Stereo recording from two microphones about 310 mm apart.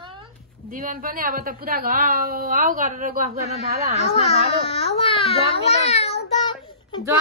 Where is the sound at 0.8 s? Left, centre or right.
Right.